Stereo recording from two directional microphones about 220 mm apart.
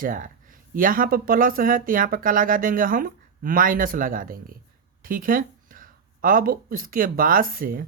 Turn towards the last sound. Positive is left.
turn(degrees=-40)  # may be behind; listen again after turning